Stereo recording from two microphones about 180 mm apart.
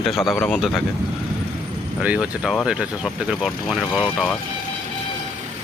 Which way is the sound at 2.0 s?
5° right (ahead or behind).